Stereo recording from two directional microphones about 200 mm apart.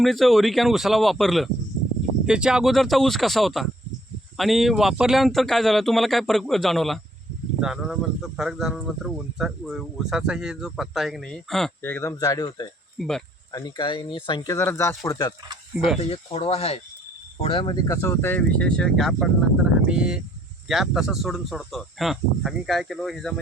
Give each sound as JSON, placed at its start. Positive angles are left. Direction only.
{"t": 0.0, "sound": "speech", "side_deg": 0}
{"t": 13.0, "sound": "speech", "side_deg": 0}
{"t": 13.5, "sound": "speech", "side_deg": 20}
{"t": 16.0, "sound": "speech", "side_deg": 30}